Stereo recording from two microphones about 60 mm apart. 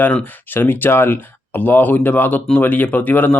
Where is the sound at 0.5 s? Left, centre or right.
Left.